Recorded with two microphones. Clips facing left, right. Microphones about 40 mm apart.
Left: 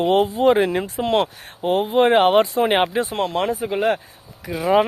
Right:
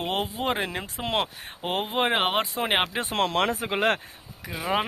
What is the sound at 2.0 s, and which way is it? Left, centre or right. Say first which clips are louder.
Speech: left 10 dB; centre.